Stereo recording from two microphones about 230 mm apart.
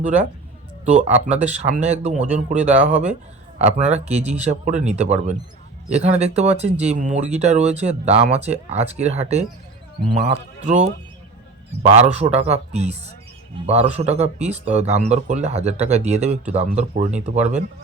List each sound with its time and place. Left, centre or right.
0.9 s speech: right